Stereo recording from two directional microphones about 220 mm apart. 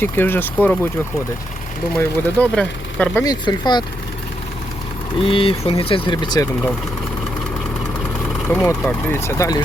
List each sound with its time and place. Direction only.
0.0 s speech: 10° left (ahead or behind)
2.0 s speech: 5° left (ahead or behind)
3.2 s speech: 20° left (ahead or behind)
5.2 s speech: 25° left (ahead or behind)
8.4 s speech: 10° left (ahead or behind)